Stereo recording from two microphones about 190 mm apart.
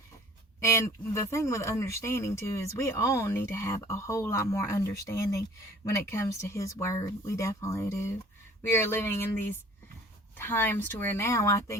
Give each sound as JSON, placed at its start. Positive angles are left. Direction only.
{"t": 0.6, "sound": "speech", "side_deg": 15}
{"t": 10.3, "sound": "speech", "side_deg": 10}